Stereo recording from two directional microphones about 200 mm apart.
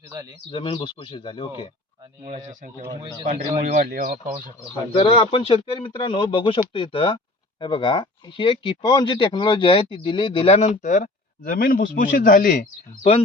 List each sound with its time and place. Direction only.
0.5 s speech: 25° left (ahead or behind)
2.8 s speech: 20° right (ahead or behind)
3.2 s speech: 35° right (ahead or behind)
4.9 s speech: 25° left (ahead or behind); by 12.6 s 40° left (ahead or behind)
13.0 s speech: 30° left (ahead or behind)